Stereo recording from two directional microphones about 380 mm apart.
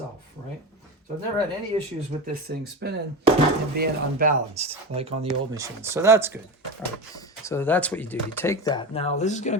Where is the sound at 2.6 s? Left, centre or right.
Right; by 6.4 s centre.